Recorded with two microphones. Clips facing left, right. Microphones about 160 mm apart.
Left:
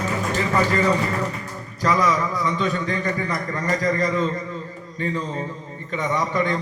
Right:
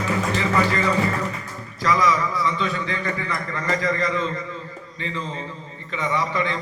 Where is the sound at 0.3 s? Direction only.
40° left (ahead or behind).